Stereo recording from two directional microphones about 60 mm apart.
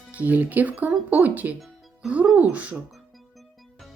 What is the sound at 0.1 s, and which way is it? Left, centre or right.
Speech, right.